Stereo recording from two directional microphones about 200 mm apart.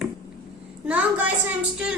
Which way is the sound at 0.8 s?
5° right (ahead or behind).